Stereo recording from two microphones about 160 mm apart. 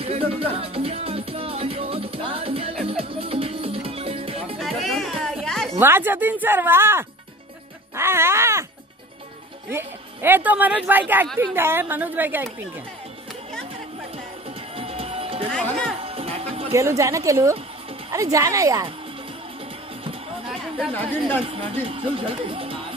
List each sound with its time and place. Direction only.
0.0 s music: 35° right (ahead or behind)
4.6 s music: centre (ahead or behind)
5.8 s speech: 15° right (ahead or behind)
7.9 s music: 15° right (ahead or behind)
9.7 s speech: 15° right (ahead or behind)
14.8 s music: 35° right (ahead or behind)
15.5 s speech: 5° left (ahead or behind)
16.0 s music: 35° right (ahead or behind)
16.7 s a woman's voice: 20° right (ahead or behind)
20.9 s speech: 10° left (ahead or behind)
21.5 s speech: 35° right (ahead or behind)